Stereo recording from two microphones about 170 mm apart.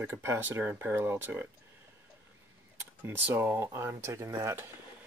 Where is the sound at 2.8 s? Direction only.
10° right (ahead or behind).